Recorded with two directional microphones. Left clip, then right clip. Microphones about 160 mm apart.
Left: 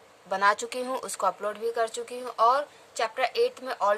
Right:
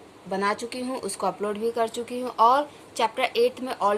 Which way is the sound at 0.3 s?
45° left (ahead or behind).